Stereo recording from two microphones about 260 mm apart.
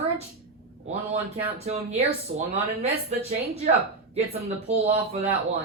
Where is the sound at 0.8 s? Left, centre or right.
Right.